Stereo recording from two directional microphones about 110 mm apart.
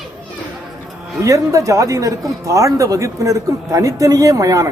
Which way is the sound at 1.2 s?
30° right (ahead or behind).